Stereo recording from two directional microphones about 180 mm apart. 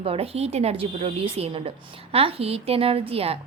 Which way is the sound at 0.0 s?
30° right (ahead or behind).